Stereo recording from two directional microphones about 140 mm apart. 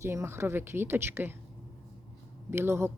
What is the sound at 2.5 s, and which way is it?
Speech, 15° right (ahead or behind).